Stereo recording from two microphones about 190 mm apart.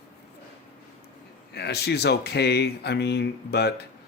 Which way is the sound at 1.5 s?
60° left (ahead or behind).